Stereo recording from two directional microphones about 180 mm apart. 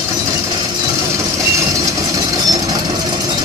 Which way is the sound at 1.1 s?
15° right (ahead or behind).